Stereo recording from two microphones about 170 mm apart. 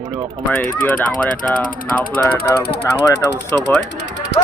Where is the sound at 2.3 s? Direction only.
70° left (ahead or behind).